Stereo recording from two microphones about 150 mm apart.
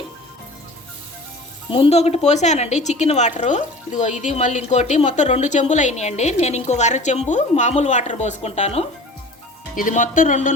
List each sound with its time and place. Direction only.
1.7 s a woman's voice: 40° left (ahead or behind)
9.7 s speech: 60° left (ahead or behind)